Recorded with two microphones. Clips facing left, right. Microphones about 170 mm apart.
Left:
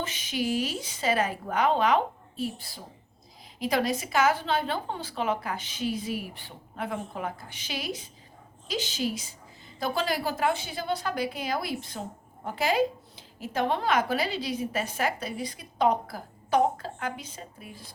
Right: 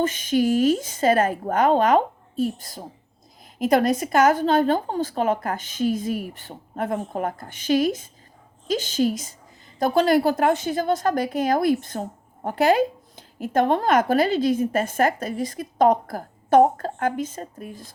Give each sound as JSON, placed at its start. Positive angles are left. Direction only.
{"t": 0.0, "sound": "a woman's voice", "side_deg": -45}